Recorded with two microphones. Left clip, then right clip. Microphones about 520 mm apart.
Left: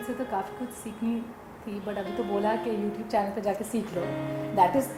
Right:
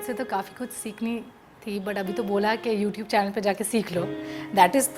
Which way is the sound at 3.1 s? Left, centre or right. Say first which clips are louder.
Right 4 dB; right.